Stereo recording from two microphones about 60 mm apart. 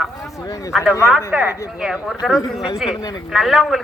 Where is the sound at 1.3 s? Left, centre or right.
Right.